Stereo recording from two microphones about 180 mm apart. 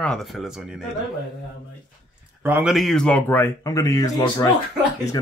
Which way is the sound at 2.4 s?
10° right (ahead or behind).